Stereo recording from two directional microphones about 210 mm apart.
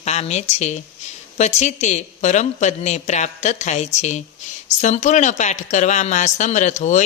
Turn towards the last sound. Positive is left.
turn(degrees=35)  # may be behind; listen again after turning